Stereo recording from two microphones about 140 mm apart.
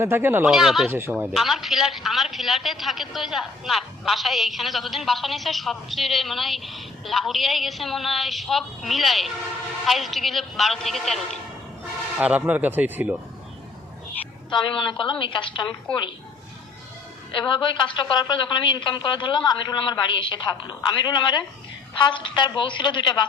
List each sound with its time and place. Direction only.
0.0 s speech: 15° right (ahead or behind)
0.4 s a man's voice: 5° right (ahead or behind)
0.9 s speech: 15° right (ahead or behind)
1.1 s a man's voice: 5° right (ahead or behind)
12.2 s speech: 10° right (ahead or behind)
14.5 s a man's voice: 35° left (ahead or behind)
17.3 s a man's voice: 35° left (ahead or behind)